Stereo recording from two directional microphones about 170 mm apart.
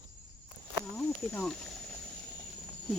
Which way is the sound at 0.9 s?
10° left (ahead or behind).